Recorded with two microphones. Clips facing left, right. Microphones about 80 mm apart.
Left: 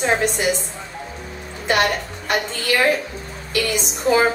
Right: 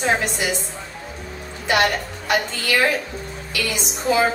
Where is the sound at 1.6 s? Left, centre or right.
Left.